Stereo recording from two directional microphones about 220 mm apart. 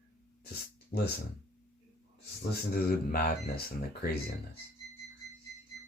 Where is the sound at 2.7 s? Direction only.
45° left (ahead or behind).